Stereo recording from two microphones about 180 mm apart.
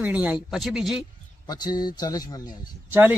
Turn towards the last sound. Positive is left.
turn(degrees=-10)  # may be behind; listen again after turning